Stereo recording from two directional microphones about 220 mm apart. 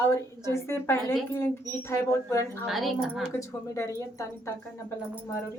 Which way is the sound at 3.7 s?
15° left (ahead or behind).